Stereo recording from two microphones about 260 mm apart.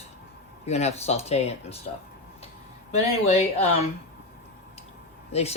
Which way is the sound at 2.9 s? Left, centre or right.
Left.